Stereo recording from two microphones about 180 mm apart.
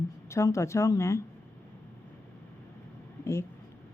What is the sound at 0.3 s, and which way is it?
Speech, 15° left (ahead or behind).